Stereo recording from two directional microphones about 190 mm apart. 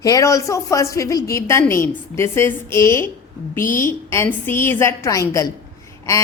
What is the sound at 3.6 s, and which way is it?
Speech, 45° left (ahead or behind).